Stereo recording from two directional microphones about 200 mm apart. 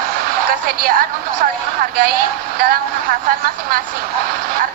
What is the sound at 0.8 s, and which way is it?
Speech, 45° right (ahead or behind).